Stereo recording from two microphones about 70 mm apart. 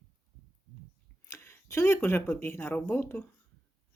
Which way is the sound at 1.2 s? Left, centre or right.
Left.